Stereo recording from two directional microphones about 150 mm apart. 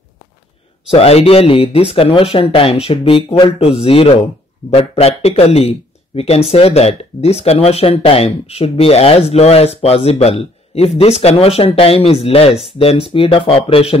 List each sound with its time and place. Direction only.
0.8 s speech: 40° left (ahead or behind)